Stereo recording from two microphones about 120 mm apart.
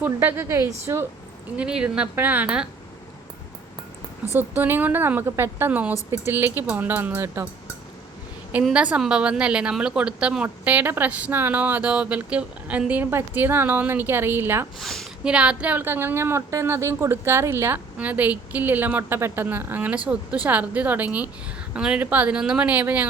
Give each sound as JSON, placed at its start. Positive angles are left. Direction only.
{"t": 0.0, "sound": "a woman's voice", "side_deg": -15}
{"t": 1.5, "sound": "a woman's voice", "side_deg": -10}
{"t": 4.4, "sound": "a woman's voice", "side_deg": -15}
{"t": 8.7, "sound": "a woman's voice", "side_deg": -10}
{"t": 14.8, "sound": "speech", "side_deg": 5}
{"t": 15.2, "sound": "a woman's voice", "side_deg": -10}